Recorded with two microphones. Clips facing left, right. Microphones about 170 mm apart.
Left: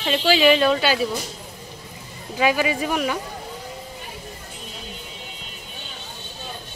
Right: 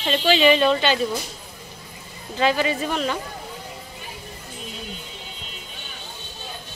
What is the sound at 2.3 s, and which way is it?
Speech, 10° left (ahead or behind).